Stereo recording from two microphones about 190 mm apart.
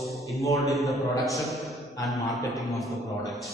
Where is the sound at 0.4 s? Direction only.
15° left (ahead or behind).